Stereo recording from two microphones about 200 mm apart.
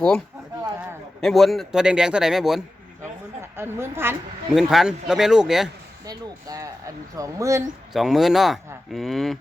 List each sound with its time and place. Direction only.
1.2 s a woman's voice: centre (ahead or behind)
6.1 s a woman's voice: 20° right (ahead or behind)
7.9 s speech: centre (ahead or behind)